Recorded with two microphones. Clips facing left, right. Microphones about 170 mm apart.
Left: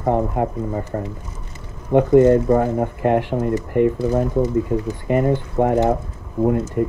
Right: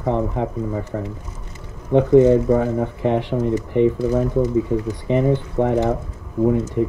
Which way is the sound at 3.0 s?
55° left (ahead or behind).